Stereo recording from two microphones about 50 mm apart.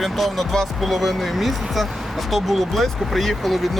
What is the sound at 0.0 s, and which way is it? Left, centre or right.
Speech, centre.